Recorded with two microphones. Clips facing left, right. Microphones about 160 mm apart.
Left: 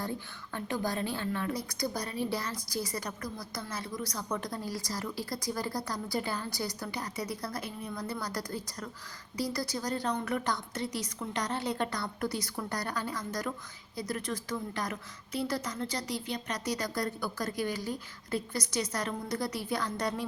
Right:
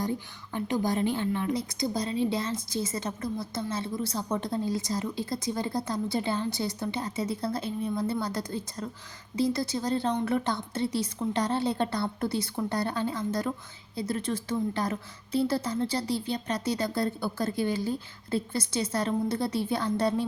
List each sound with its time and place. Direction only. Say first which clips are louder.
0.0 s a woman's voice: right 5 dB; 15° right (ahead or behind)